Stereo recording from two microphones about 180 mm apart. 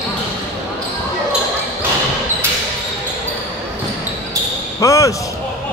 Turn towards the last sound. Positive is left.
turn(degrees=15)  # may be behind; listen again after turning